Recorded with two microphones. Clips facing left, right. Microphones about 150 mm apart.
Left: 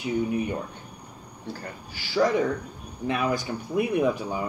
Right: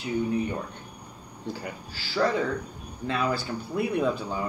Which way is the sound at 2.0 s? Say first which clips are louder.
Left 3 dB; 15° left (ahead or behind).